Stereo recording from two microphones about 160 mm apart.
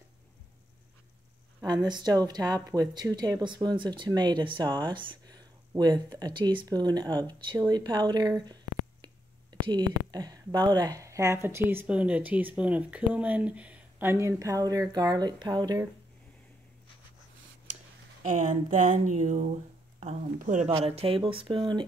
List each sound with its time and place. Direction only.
1.7 s speech: 25° right (ahead or behind)
18.2 s speech: 50° right (ahead or behind)
20.8 s speech: 40° right (ahead or behind)